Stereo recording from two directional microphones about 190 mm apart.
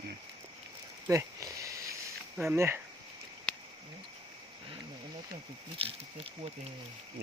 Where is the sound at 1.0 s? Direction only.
15° right (ahead or behind).